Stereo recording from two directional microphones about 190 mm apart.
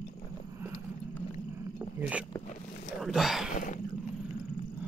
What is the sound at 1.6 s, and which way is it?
Roaring cats, 10° right (ahead or behind).